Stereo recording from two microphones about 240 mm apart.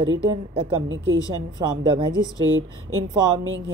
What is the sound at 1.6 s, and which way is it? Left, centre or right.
Speech, centre.